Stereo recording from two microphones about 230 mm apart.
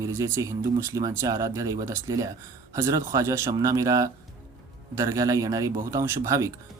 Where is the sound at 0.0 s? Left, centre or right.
Centre.